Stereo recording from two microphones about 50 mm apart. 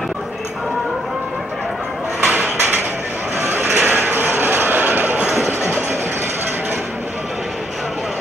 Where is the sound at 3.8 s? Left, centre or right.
Right.